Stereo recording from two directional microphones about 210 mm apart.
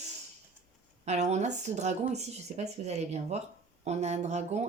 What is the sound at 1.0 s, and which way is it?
Speech, 30° right (ahead or behind).